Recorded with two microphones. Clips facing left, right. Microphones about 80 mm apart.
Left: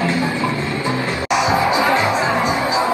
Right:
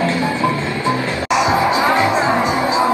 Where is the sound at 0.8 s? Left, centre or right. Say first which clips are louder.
Right 3 dB; right.